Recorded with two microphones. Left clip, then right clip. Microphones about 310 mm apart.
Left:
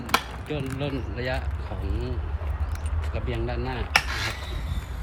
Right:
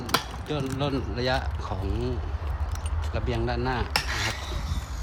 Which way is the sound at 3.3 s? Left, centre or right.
Centre.